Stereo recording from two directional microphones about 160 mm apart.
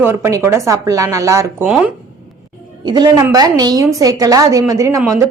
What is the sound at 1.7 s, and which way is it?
Speech, 5° right (ahead or behind).